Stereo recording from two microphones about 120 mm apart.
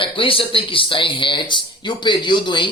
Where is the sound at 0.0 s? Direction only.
45° left (ahead or behind).